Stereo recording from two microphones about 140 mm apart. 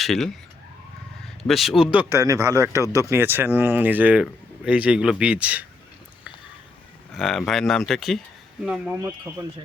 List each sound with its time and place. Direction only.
0.0 s speech: centre (ahead or behind)
1.4 s speech: centre (ahead or behind)
7.2 s speech: centre (ahead or behind)